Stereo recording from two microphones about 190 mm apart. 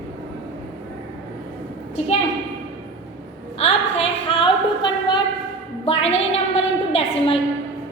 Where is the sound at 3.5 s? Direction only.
30° left (ahead or behind).